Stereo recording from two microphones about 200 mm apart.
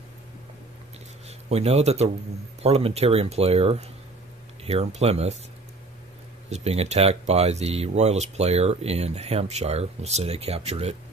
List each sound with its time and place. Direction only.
1.5 s speech: 30° right (ahead or behind)
6.5 s speech: 30° right (ahead or behind)